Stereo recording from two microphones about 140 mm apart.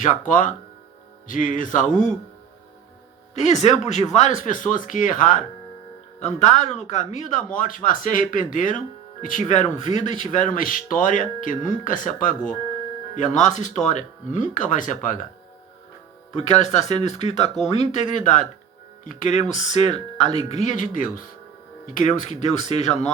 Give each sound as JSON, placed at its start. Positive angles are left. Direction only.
{"t": 0.0, "sound": "speech", "side_deg": 65}
{"t": 3.4, "sound": "speech", "side_deg": 55}
{"t": 6.1, "sound": "speech", "side_deg": 55}
{"t": 13.1, "sound": "speech", "side_deg": 60}
{"t": 16.4, "sound": "speech", "side_deg": 55}